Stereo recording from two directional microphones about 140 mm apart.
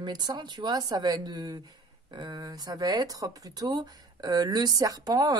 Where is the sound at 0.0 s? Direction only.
30° right (ahead or behind).